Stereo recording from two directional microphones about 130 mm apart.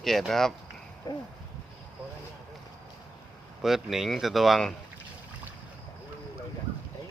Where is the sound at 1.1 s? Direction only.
30° left (ahead or behind).